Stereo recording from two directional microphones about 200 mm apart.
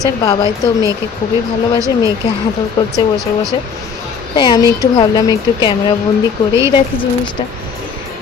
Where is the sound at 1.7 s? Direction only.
15° right (ahead or behind).